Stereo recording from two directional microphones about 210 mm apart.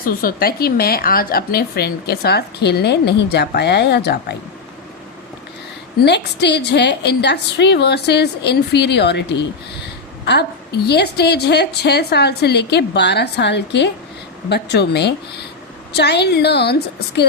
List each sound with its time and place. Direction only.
0.0 s a woman's voice: 45° left (ahead or behind)
6.0 s a woman's voice: 55° left (ahead or behind)